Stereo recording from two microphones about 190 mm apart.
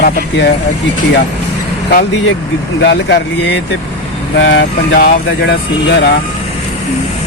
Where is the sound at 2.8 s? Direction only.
70° left (ahead or behind).